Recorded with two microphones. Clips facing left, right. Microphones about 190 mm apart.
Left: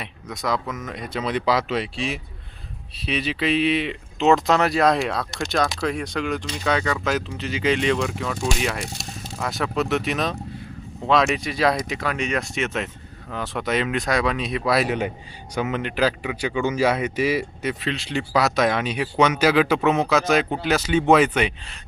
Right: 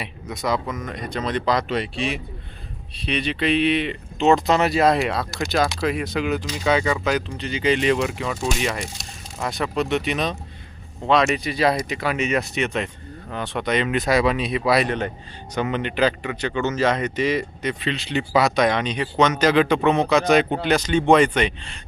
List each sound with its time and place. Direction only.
0.0 s speech: centre (ahead or behind)